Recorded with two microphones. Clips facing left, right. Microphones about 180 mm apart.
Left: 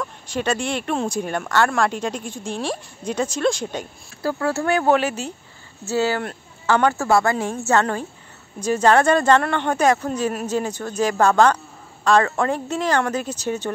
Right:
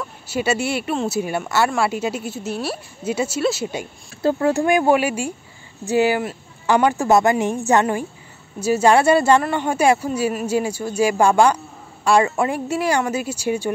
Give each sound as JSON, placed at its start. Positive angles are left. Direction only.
{"t": 0.0, "sound": "speech", "side_deg": -5}
{"t": 4.2, "sound": "speech", "side_deg": -20}